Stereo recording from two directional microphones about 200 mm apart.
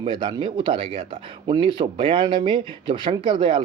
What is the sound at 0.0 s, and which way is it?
Speech, 25° right (ahead or behind).